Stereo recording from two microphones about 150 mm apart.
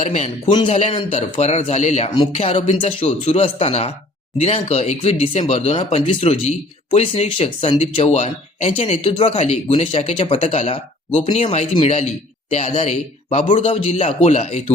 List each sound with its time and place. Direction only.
0.0 s speech: 50° left (ahead or behind)
2.3 s a man's voice: 40° left (ahead or behind)
9.0 s a man's voice: 35° left (ahead or behind)